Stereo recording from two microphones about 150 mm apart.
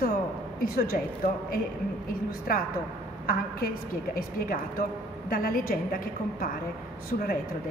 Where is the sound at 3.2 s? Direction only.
75° left (ahead or behind).